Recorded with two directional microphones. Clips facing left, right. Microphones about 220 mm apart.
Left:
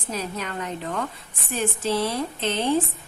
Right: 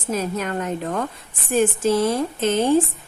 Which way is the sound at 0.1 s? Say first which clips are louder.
Right 6 dB; 45° right (ahead or behind).